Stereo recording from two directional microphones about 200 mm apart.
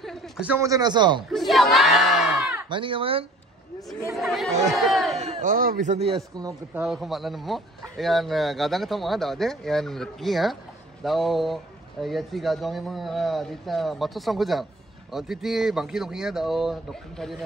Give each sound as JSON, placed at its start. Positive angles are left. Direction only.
{"t": 0.0, "sound": "a man's voice", "side_deg": 0}
{"t": 1.3, "sound": "a man's voice", "side_deg": 0}
{"t": 2.7, "sound": "speech", "side_deg": -25}
{"t": 4.2, "sound": "a man's voice", "side_deg": 0}
{"t": 5.1, "sound": "speech", "side_deg": -35}
{"t": 6.7, "sound": "a man's voice", "side_deg": 0}